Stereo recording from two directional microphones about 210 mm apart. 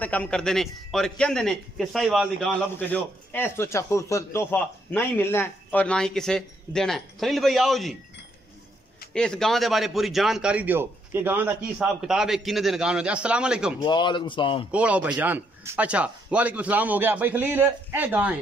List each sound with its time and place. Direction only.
0.0 s a man's voice: 5° left (ahead or behind)
9.1 s a man's voice: 5° left (ahead or behind)
13.7 s speech: 20° left (ahead or behind)
14.7 s a man's voice: 5° right (ahead or behind)